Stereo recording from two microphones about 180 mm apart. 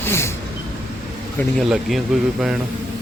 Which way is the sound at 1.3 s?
Centre (ahead or behind).